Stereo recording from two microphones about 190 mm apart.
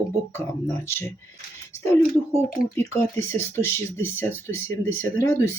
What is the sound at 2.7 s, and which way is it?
Speech, 15° left (ahead or behind).